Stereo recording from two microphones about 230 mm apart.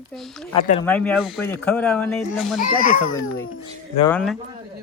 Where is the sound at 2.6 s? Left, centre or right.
Left.